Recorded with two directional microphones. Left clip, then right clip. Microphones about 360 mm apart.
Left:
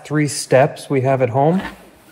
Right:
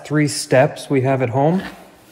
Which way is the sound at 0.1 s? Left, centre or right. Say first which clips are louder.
Left 1 dB; centre.